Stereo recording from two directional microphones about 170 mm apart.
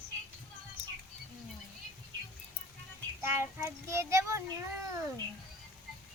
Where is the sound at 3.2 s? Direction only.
15° right (ahead or behind).